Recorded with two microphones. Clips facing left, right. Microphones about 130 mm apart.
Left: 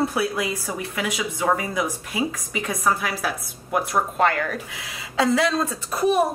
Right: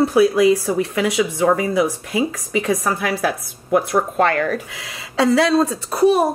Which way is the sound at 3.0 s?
55° right (ahead or behind).